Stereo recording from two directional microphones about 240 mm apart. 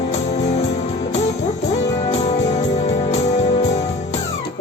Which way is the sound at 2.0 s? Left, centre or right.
Left.